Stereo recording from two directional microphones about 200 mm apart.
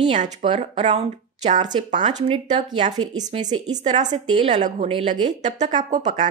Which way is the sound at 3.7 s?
35° right (ahead or behind).